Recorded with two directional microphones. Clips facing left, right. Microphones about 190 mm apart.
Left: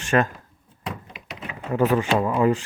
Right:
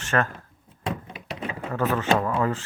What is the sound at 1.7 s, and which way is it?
Speech, 15° left (ahead or behind).